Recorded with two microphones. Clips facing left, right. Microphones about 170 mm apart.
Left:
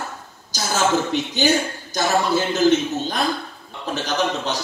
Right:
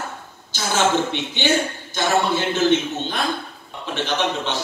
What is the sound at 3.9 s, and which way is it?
Speech, 40° left (ahead or behind).